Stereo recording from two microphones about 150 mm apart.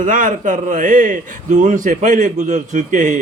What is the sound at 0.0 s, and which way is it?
A man's voice, 65° right (ahead or behind).